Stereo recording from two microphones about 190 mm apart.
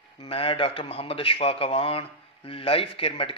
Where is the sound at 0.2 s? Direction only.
30° left (ahead or behind).